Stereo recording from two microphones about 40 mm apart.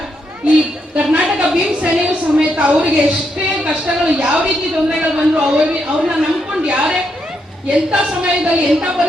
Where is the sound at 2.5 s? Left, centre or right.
Right.